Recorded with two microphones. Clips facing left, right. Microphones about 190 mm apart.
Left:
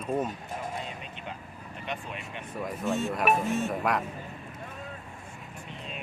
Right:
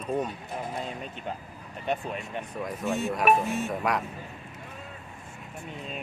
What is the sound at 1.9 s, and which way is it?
Speech, 40° right (ahead or behind).